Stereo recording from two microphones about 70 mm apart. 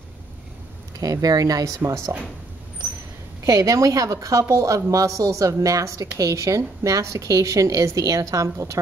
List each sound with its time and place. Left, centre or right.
0.9 s speech: right
3.4 s a woman's voice: right